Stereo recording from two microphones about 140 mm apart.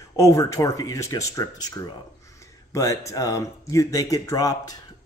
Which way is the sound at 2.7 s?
25° left (ahead or behind).